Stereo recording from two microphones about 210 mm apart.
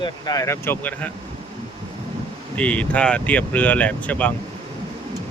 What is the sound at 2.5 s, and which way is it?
Speech, 5° left (ahead or behind).